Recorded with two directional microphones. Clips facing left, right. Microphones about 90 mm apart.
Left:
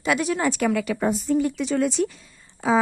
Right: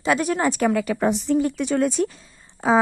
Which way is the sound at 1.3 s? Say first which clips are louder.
Right 1 dB; 50° right (ahead or behind).